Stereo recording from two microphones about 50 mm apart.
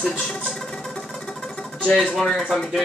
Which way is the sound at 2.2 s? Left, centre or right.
Centre.